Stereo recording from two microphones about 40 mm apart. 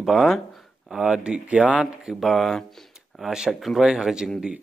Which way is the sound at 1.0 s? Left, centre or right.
Centre.